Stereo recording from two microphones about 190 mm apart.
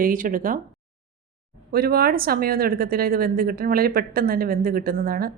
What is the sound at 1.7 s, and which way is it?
Speech, 55° right (ahead or behind).